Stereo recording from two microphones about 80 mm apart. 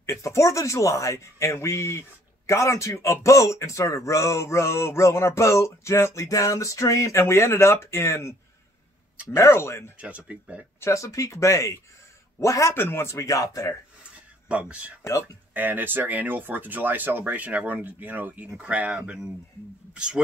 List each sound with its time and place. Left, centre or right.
0.0 s speech: left
9.9 s speech: centre
10.8 s speech: left
12.7 s speech: left
14.5 s speech: centre